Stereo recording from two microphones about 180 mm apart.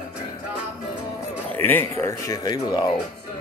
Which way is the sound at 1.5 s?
10° left (ahead or behind).